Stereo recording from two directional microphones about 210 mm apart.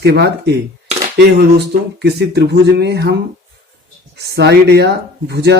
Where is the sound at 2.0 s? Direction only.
50° right (ahead or behind).